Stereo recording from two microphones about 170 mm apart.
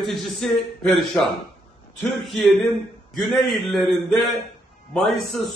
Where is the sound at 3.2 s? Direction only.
Centre (ahead or behind).